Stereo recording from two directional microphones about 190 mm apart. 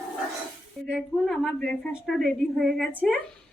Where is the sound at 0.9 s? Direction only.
Centre (ahead or behind).